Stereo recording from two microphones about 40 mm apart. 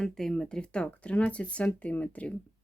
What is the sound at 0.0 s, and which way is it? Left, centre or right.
Speech, centre.